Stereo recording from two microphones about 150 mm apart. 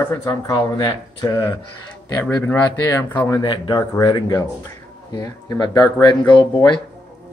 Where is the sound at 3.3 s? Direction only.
30° left (ahead or behind).